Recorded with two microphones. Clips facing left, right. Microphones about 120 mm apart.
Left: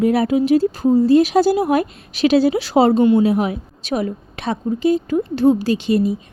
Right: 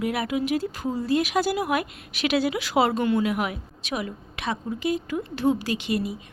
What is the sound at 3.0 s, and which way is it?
Speech, 20° left (ahead or behind).